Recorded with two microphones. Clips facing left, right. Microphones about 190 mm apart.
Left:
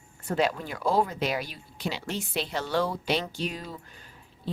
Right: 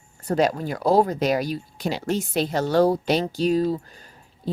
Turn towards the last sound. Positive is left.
turn(degrees=-40)  # may be behind; listen again after turning